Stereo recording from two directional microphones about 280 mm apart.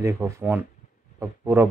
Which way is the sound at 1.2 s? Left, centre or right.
Centre.